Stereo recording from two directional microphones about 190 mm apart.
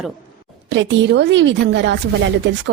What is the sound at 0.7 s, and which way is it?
Speech, 70° right (ahead or behind).